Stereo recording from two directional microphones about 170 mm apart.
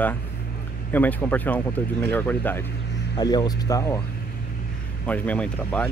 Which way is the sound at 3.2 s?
25° left (ahead or behind).